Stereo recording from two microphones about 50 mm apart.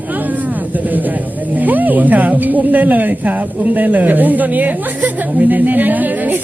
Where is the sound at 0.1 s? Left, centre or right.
Right.